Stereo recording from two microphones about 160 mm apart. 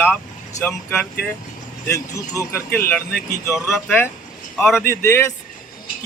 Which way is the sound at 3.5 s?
Centre (ahead or behind).